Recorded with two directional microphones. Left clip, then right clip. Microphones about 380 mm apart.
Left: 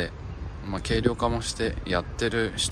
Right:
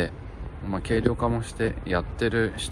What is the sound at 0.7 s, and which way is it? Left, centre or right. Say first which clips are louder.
Speech: right 1 dB; centre.